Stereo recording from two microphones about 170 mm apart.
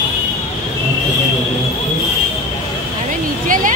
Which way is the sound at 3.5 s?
50° right (ahead or behind).